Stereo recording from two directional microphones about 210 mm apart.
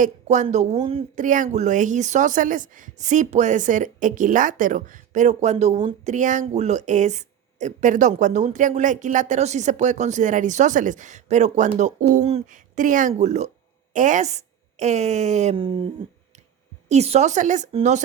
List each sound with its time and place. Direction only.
0.0 s a woman's voice: 35° right (ahead or behind)
16.9 s speech: 30° right (ahead or behind)